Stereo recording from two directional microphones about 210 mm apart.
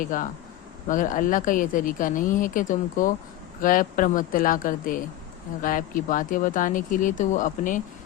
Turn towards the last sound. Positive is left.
turn(degrees=40)  # may be behind; listen again after turning